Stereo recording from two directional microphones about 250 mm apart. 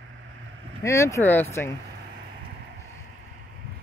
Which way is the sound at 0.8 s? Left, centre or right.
Centre.